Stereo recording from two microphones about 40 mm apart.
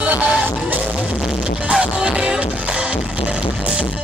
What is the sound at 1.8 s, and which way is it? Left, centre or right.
Music, right.